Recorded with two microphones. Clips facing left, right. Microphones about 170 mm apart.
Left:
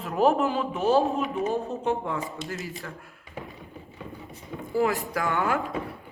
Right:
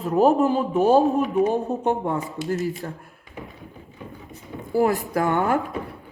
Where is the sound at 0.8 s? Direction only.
50° right (ahead or behind).